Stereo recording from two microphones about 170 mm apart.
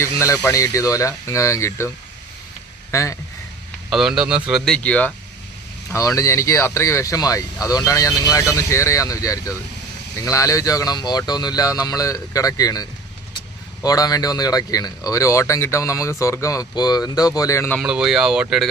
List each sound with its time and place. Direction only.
0.2 s speech: 20° left (ahead or behind)
2.9 s speech: 15° left (ahead or behind)
3.8 s speech: centre (ahead or behind)
5.9 s speech: 20° left (ahead or behind)
17.7 s speech: 5° right (ahead or behind)